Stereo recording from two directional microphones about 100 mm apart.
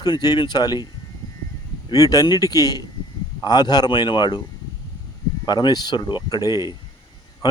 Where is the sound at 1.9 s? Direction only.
40° left (ahead or behind).